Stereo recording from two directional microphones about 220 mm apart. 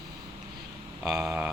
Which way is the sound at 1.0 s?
Centre (ahead or behind).